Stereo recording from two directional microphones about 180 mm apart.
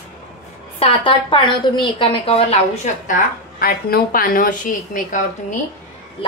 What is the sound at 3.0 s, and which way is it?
A woman's voice, 50° left (ahead or behind).